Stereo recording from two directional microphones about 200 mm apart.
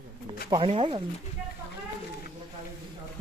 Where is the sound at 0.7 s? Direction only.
30° right (ahead or behind).